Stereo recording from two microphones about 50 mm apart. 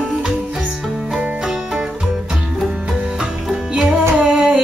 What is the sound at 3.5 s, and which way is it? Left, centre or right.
Music, centre.